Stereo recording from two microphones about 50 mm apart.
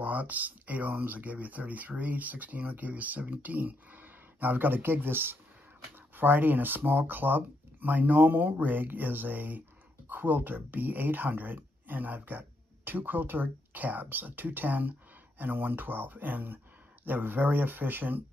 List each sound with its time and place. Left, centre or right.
0.0 s speech: right